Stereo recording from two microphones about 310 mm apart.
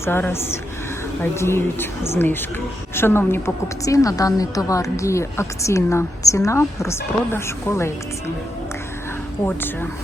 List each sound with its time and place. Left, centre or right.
0.0 s a woman's voice: centre